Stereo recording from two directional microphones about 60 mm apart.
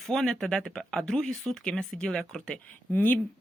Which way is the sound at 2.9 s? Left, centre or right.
Left.